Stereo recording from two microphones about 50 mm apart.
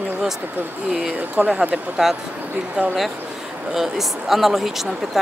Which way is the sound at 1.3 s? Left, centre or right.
Right.